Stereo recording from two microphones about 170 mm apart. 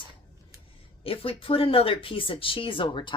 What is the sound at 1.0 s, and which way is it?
Speech, 35° left (ahead or behind).